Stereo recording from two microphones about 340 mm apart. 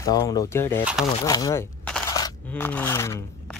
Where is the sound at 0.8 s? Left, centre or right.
Centre.